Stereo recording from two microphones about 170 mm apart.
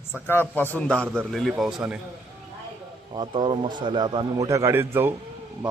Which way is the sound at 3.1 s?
30° right (ahead or behind).